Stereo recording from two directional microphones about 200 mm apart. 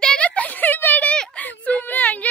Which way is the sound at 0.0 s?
5° left (ahead or behind).